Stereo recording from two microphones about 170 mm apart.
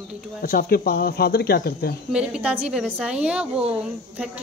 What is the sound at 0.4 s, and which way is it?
Speech, 60° left (ahead or behind).